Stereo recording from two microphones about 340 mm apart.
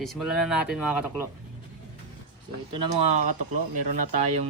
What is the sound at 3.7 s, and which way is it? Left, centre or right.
Speech, right.